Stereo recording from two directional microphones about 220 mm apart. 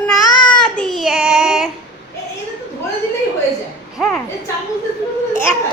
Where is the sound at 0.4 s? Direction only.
5° left (ahead or behind).